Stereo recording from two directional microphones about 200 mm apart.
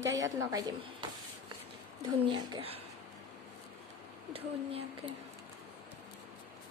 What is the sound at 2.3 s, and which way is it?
Speech, 25° right (ahead or behind).